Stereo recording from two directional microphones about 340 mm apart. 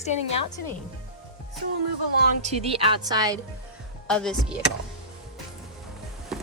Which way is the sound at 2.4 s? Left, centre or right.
Centre.